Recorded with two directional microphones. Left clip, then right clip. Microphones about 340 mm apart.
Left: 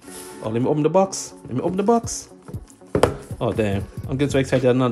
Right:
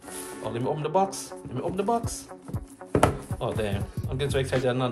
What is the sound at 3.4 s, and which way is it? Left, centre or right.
Speech, left.